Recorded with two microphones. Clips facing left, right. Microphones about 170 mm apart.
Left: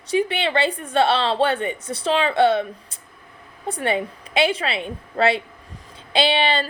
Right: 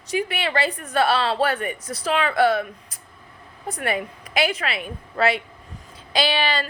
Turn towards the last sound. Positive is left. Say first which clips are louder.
# left 3 dB
turn(degrees=25)  # may be behind; listen again after turning